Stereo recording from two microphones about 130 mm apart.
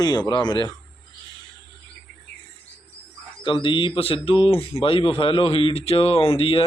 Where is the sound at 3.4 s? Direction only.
40° left (ahead or behind).